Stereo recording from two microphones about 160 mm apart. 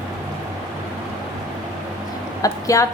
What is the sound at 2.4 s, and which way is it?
Speech, 20° left (ahead or behind).